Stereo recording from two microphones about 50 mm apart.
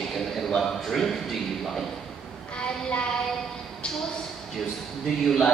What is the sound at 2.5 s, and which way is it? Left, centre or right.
Child singing, left.